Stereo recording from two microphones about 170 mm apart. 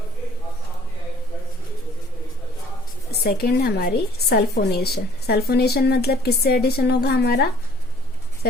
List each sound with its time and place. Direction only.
3.1 s a woman's voice: 65° left (ahead or behind)